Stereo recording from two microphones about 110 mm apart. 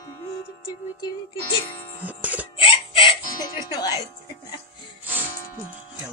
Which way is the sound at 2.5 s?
55° left (ahead or behind).